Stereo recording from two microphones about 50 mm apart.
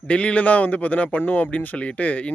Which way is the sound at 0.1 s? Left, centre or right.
Left.